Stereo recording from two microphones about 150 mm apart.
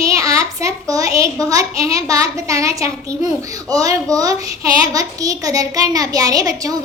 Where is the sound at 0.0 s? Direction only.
20° right (ahead or behind).